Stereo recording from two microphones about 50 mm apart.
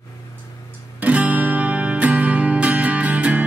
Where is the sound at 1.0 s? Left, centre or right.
Right.